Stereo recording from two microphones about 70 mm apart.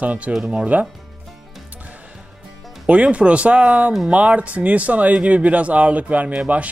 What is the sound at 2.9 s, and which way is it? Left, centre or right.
A man's voice, centre.